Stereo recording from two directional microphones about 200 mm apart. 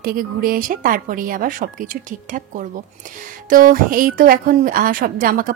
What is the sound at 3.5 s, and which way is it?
A woman's voice, 45° right (ahead or behind).